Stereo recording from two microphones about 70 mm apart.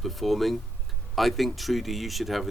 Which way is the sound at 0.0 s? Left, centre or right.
Centre.